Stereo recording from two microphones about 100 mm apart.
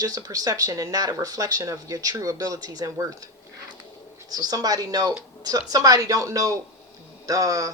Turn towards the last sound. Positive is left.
turn(degrees=-35)  # may be behind; listen again after turning